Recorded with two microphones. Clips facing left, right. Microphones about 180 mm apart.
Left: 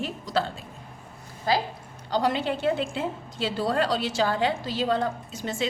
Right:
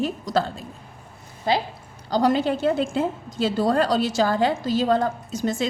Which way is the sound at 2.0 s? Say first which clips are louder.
Right 5 dB; 40° right (ahead or behind).